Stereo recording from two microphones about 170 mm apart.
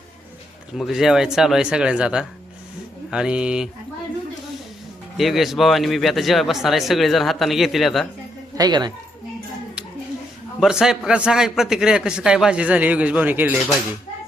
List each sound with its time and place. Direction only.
0.8 s a man's voice: centre (ahead or behind)
5.1 s a man's voice: centre (ahead or behind)
8.5 s a woman's voice: 25° right (ahead or behind)
10.6 s a man's voice: 5° right (ahead or behind)